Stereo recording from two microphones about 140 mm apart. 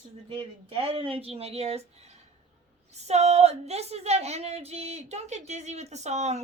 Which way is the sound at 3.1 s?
50° right (ahead or behind).